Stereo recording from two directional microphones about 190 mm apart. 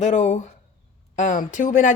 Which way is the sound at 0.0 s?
35° left (ahead or behind).